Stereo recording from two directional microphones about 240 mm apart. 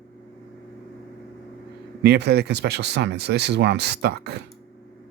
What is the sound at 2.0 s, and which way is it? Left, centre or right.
Speech, right.